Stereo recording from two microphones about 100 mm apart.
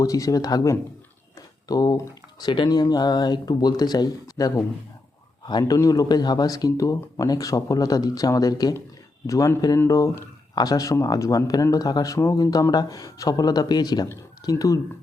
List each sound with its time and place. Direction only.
0.0 s speech: 35° left (ahead or behind)
1.4 s a sound: 40° left (ahead or behind)
2.4 s speech: 45° left (ahead or behind)